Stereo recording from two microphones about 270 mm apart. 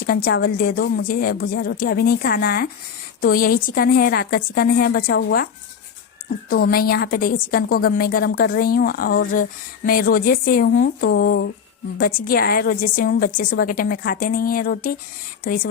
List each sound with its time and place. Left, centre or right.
0.0 s a woman's voice: left
6.5 s a woman's voice: left